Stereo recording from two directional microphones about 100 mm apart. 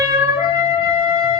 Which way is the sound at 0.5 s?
25° right (ahead or behind).